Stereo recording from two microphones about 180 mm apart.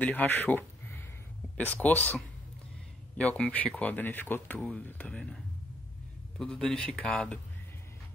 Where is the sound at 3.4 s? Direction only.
5° left (ahead or behind).